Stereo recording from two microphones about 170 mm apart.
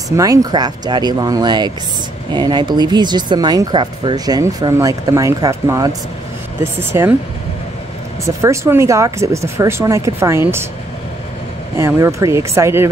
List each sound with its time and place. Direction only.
0.1 s speech: 20° right (ahead or behind)
8.4 s speech: 15° right (ahead or behind)
11.7 s speech: 15° right (ahead or behind)